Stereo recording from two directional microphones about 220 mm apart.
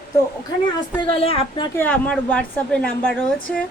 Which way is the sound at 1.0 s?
25° left (ahead or behind).